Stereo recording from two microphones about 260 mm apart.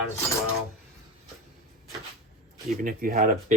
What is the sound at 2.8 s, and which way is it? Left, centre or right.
Speech, right.